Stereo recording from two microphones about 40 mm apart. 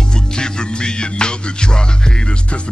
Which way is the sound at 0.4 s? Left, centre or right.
Left.